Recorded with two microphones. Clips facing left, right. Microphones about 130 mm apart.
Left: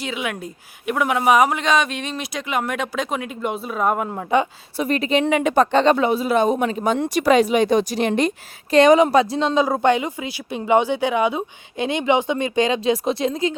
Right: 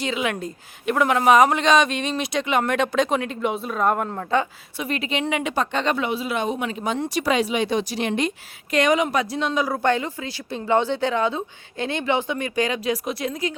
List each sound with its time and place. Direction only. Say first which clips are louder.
0.0 s a woman's voice: right 2 dB; 5° left (ahead or behind)
4.8 s a woman's voice: left 6 dB; 40° left (ahead or behind)
5.8 s speech: left 7 dB; 35° left (ahead or behind)